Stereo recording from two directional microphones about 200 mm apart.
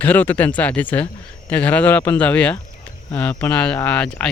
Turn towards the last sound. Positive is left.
turn(degrees=5)  # may be behind; listen again after turning